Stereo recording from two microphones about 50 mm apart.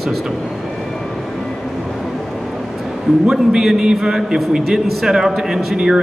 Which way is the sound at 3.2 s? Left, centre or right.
Centre.